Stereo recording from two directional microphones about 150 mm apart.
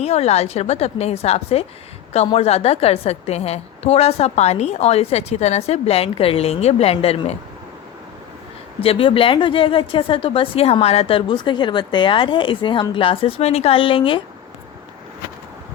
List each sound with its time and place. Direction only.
0.0 s a woman's voice: 45° left (ahead or behind)
8.8 s a woman's voice: 40° left (ahead or behind)